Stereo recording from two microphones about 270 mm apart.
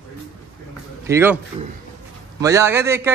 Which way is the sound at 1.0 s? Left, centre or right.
Centre.